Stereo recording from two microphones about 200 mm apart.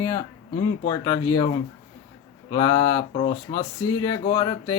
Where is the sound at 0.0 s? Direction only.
20° left (ahead or behind).